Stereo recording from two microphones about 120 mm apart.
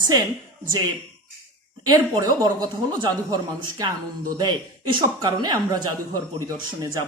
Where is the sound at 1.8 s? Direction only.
30° right (ahead or behind).